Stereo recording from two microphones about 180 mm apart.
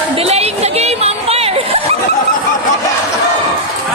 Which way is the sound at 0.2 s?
35° right (ahead or behind).